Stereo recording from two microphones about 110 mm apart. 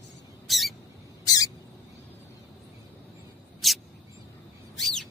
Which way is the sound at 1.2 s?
35° left (ahead or behind).